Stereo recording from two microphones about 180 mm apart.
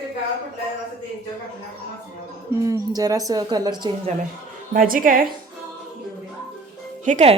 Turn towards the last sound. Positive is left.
turn(degrees=-40)  # may be behind; listen again after turning